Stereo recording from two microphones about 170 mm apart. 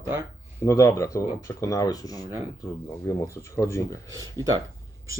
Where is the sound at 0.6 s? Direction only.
20° left (ahead or behind).